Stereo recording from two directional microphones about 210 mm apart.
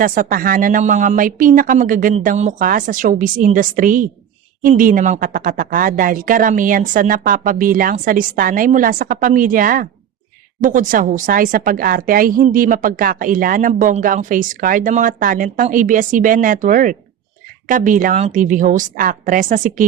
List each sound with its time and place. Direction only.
0.0 s a woman's voice: 40° right (ahead or behind)